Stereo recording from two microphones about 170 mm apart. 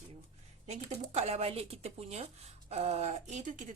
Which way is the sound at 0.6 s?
40° right (ahead or behind).